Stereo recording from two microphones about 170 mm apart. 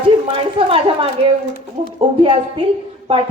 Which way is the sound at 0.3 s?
30° right (ahead or behind).